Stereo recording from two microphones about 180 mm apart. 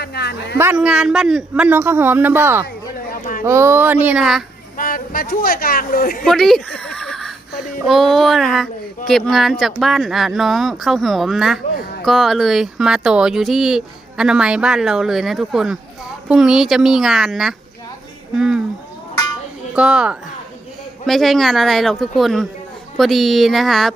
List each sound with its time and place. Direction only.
0.0 s speech: 65° left (ahead or behind)
0.6 s a man's voice: 5° right (ahead or behind)
3.1 s a sound: 50° left (ahead or behind)
3.4 s a man's voice: 15° right (ahead or behind)
4.8 s speech: 50° left (ahead or behind)
6.2 s a sound: centre (ahead or behind)
7.9 s speech: centre (ahead or behind)
19.7 s speech: 5° right (ahead or behind)